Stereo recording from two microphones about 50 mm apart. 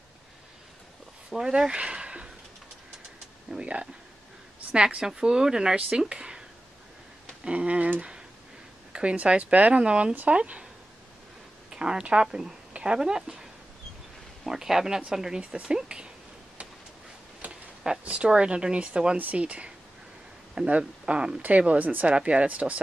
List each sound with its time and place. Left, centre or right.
1.3 s speech: centre
3.5 s speech: centre
7.4 s speech: right
8.9 s speech: right
11.7 s speech: centre
17.4 s a sound: right
18.0 s speech: right
21.4 s speech: right
22.1 s speech: right